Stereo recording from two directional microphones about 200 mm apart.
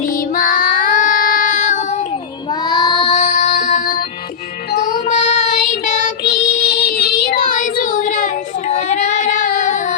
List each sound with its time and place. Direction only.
0.1 s child singing: 45° left (ahead or behind)
2.5 s child singing: 20° left (ahead or behind); by 6.1 s 35° left (ahead or behind)
6.2 s child singing: 55° left (ahead or behind)